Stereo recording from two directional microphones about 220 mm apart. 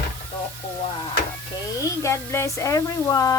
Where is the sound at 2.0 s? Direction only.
10° left (ahead or behind).